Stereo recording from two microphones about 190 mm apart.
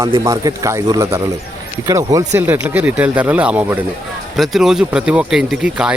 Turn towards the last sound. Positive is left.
turn(degrees=-5)  # may be behind; listen again after turning